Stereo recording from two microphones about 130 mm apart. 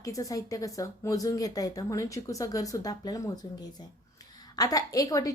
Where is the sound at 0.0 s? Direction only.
25° left (ahead or behind).